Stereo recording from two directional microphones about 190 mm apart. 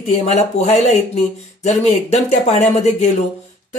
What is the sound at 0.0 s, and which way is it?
A woman's voice, 35° left (ahead or behind).